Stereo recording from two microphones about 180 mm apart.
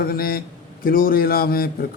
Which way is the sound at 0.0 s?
55° left (ahead or behind).